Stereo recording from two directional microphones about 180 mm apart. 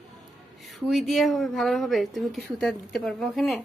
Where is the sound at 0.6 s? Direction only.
Centre (ahead or behind).